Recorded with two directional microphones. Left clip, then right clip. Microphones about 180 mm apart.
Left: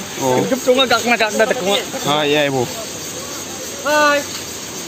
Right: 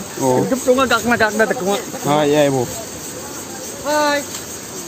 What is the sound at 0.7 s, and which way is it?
Speech, 40° right (ahead or behind).